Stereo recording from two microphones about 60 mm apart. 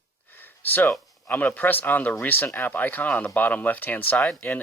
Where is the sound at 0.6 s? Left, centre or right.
Left.